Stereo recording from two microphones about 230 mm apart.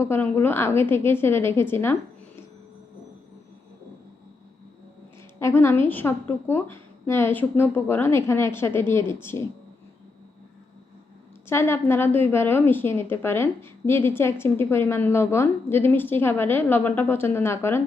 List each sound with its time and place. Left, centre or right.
0.0 s a woman's voice: centre
5.4 s a woman's voice: centre
11.4 s a woman's voice: centre